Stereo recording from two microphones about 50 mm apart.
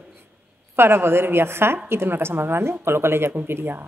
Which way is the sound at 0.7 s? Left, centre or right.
Right.